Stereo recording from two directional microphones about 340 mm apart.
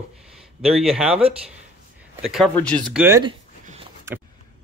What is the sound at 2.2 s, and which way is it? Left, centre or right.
Speech, centre.